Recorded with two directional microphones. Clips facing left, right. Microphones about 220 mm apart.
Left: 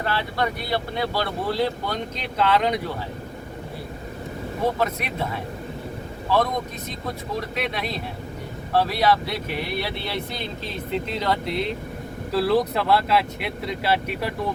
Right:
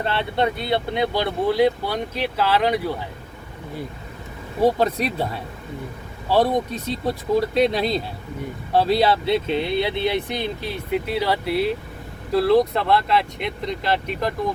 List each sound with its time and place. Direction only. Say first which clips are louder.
0.0 s speech: right 3 dB; 25° right (ahead or behind); by 2.9 s 5° right (ahead or behind)
4.6 s speech: right 6 dB; 35° right (ahead or behind); by 14.3 s 10° left (ahead or behind)